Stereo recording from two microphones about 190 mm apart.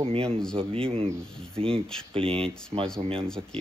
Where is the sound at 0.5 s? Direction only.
30° right (ahead or behind).